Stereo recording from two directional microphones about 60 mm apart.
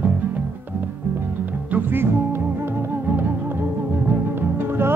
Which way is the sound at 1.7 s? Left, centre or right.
Right.